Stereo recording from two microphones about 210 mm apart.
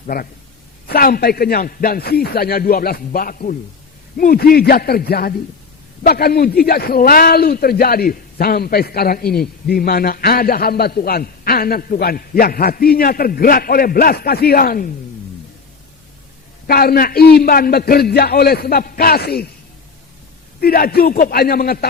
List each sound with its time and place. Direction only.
0.9 s a man's voice: 45° left (ahead or behind)
16.6 s a man's voice: 45° left (ahead or behind)
20.6 s a man's voice: 45° left (ahead or behind)